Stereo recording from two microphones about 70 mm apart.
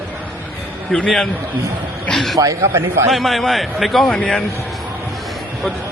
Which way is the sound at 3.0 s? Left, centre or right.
Centre.